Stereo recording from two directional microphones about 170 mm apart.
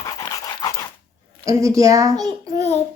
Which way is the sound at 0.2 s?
20° left (ahead or behind).